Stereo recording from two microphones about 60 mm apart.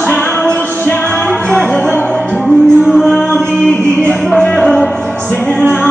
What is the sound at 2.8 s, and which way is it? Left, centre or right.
Music, centre.